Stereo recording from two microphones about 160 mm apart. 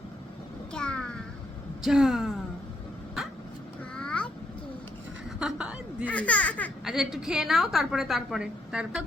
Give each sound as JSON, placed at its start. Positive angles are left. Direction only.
{"t": 0.7, "sound": "a sound", "side_deg": 5}
{"t": 1.8, "sound": "a woman's voice", "side_deg": 0}
{"t": 3.9, "sound": "a sound", "side_deg": 5}
{"t": 5.4, "sound": "chuckle", "side_deg": -5}
{"t": 6.1, "sound": "speech", "side_deg": 10}
{"t": 6.8, "sound": "a woman's voice", "side_deg": -5}